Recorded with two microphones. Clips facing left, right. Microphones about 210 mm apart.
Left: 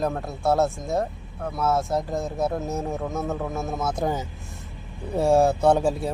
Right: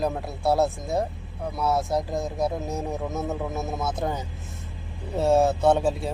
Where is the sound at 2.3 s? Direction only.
15° right (ahead or behind).